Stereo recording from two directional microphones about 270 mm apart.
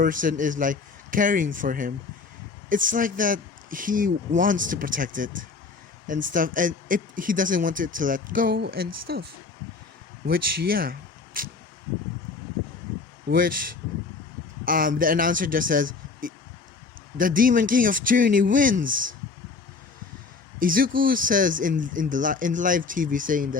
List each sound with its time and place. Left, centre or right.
0.0 s speech: right
10.2 s speech: right
13.3 s speech: right
20.6 s speech: right